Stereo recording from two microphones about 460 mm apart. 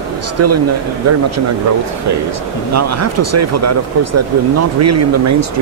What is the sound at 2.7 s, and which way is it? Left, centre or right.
Speech, right.